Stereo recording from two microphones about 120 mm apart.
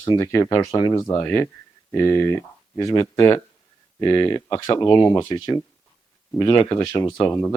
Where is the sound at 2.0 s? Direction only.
25° left (ahead or behind).